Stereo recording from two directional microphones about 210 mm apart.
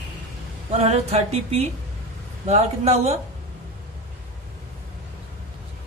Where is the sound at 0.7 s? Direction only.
30° right (ahead or behind).